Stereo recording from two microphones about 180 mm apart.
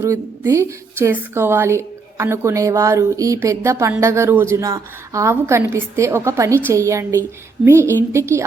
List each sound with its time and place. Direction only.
0.0 s a woman's voice: 15° right (ahead or behind)